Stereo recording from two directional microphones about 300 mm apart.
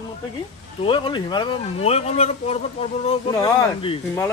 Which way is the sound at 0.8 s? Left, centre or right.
Centre.